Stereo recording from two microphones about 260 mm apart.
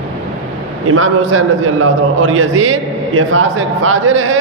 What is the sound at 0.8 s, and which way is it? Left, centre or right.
A man's voice, right.